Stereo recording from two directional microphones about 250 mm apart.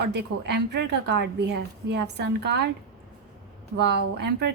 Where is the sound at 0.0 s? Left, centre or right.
Right.